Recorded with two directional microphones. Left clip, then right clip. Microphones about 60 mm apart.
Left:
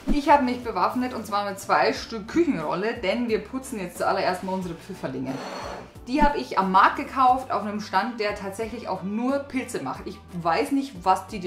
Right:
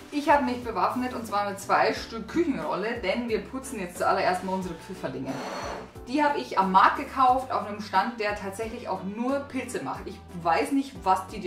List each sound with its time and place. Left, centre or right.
0.1 s a woman's voice: left
5.4 s music: centre
6.0 s a woman's voice: left